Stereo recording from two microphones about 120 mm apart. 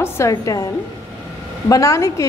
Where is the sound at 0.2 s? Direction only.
25° left (ahead or behind).